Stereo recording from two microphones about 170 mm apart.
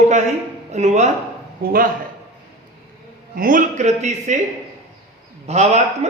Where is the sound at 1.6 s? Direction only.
60° right (ahead or behind).